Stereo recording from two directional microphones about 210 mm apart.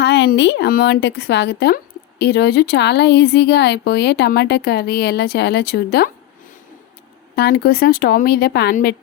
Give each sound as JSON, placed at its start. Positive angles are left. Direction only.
{"t": 0.0, "sound": "a woman's voice", "side_deg": 55}
{"t": 7.3, "sound": "a woman's voice", "side_deg": 50}